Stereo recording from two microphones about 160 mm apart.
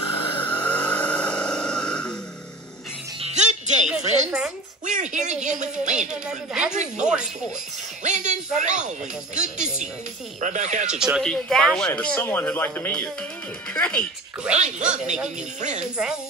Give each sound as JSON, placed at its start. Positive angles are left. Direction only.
{"t": 0.3, "sound": "a sound", "side_deg": 10}
{"t": 3.3, "sound": "music", "side_deg": -45}
{"t": 3.9, "sound": "a sound", "side_deg": -5}
{"t": 4.8, "sound": "a sound", "side_deg": -50}
{"t": 5.6, "sound": "a woman's voice", "side_deg": -50}
{"t": 6.2, "sound": "speech", "side_deg": -5}
{"t": 8.0, "sound": "a woman's voice", "side_deg": -50}
{"t": 11.0, "sound": "speech", "side_deg": -5}
{"t": 14.5, "sound": "speech", "side_deg": -5}
{"t": 15.2, "sound": "a woman's voice", "side_deg": -50}